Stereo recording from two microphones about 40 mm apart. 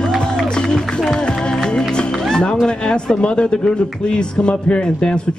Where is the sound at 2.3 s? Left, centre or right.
Centre.